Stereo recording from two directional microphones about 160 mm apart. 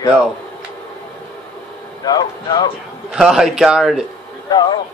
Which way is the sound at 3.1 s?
5° right (ahead or behind).